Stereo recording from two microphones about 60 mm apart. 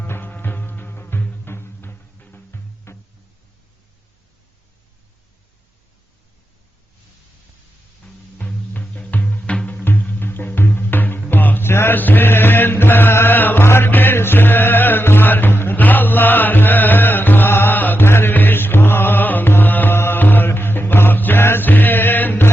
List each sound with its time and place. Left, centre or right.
0.0 s music: left
8.4 s music: left